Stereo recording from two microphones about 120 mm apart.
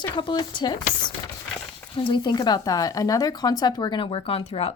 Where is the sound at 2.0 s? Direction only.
40° left (ahead or behind).